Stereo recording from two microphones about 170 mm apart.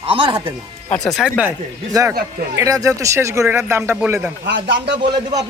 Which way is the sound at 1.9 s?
20° right (ahead or behind).